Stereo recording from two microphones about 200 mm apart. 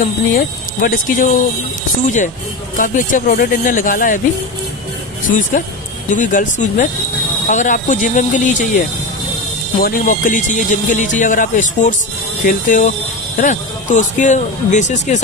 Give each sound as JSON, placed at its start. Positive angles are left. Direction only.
{"t": 0.0, "sound": "speech", "side_deg": 45}
{"t": 2.0, "sound": "speech", "side_deg": 40}
{"t": 6.0, "sound": "speech", "side_deg": 40}